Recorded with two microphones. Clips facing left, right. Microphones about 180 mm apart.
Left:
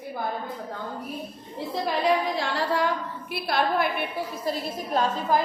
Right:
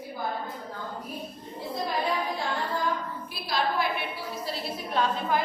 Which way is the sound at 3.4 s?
60° left (ahead or behind).